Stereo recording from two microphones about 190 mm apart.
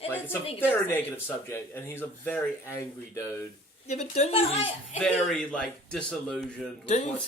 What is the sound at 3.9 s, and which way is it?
A woman's voice, 35° left (ahead or behind).